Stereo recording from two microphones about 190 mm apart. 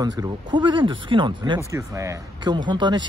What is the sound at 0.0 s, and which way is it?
Speech, 20° right (ahead or behind).